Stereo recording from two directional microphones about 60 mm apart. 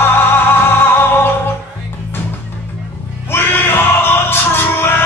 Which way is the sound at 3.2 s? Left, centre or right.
Left.